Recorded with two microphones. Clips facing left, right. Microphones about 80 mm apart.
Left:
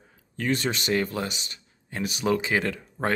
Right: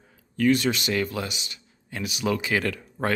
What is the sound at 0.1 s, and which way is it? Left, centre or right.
Speech, left.